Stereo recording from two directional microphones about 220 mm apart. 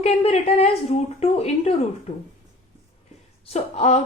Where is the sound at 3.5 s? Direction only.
30° left (ahead or behind).